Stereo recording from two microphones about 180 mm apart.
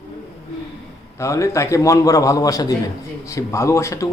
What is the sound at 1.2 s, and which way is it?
A man's voice, 15° left (ahead or behind).